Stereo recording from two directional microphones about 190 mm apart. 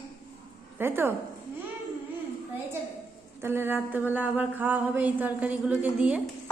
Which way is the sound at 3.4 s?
10° right (ahead or behind).